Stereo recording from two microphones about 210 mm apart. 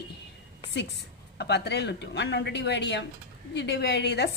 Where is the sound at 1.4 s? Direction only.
55° left (ahead or behind).